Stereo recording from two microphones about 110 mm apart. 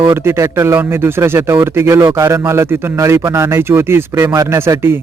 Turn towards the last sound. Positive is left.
turn(degrees=-20)  # may be behind; listen again after turning